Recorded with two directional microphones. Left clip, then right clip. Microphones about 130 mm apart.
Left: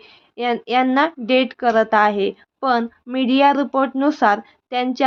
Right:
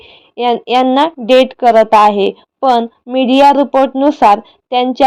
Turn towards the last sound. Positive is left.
turn(degrees=-25)  # may be behind; listen again after turning